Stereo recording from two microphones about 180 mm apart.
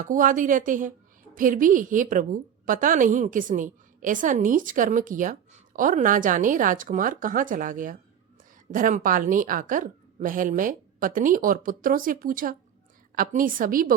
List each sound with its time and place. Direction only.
0.0 s a woman's voice: 45° right (ahead or behind)